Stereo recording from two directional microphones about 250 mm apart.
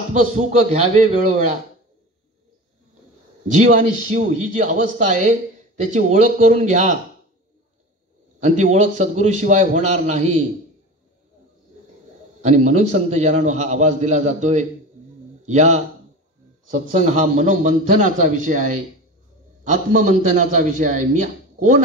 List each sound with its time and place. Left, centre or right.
0.4 s a man's voice: right
3.6 s a man's voice: right
8.4 s a man's voice: right
12.4 s a man's voice: right
16.8 s a man's voice: right